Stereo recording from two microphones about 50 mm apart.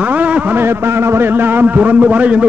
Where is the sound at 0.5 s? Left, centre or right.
Right.